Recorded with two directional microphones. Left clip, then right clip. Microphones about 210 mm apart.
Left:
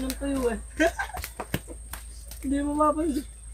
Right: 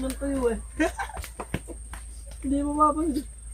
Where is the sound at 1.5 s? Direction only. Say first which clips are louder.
Left 1 dB; 50° left (ahead or behind).